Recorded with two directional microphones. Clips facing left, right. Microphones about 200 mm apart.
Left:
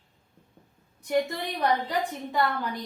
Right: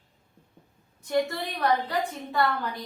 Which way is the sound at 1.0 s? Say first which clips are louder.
Even; 15° left (ahead or behind).